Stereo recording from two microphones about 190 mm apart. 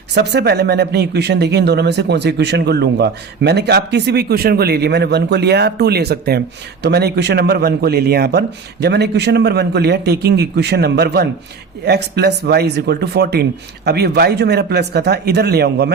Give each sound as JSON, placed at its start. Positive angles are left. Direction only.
{"t": 0.1, "sound": "speech", "side_deg": -60}